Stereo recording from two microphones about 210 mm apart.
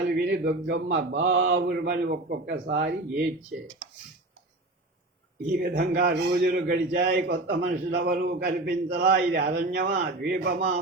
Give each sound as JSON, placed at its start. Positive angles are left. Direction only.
{"t": 0.1, "sound": "a man's voice", "side_deg": -50}
{"t": 1.3, "sound": "mantra", "side_deg": -60}
{"t": 1.5, "sound": "a man's voice", "side_deg": -50}
{"t": 5.5, "sound": "a man's voice", "side_deg": -45}